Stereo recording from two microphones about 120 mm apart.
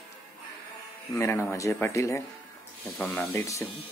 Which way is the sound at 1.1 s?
15° left (ahead or behind).